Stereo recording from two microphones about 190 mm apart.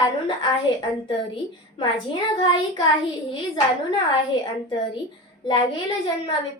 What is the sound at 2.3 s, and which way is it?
Speech, 25° left (ahead or behind).